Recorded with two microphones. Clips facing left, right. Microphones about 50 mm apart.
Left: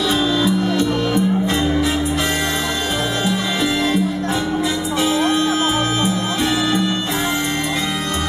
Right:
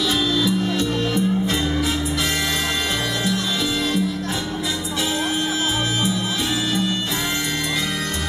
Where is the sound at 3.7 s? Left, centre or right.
Centre.